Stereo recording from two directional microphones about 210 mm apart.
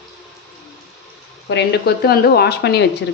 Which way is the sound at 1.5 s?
55° left (ahead or behind).